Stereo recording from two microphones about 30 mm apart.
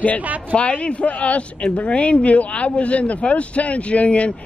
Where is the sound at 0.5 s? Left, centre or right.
Left.